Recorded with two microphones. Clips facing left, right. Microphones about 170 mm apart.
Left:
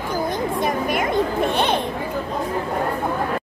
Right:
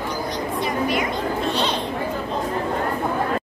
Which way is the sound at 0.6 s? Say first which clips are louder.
Right 1 dB; 50° left (ahead or behind).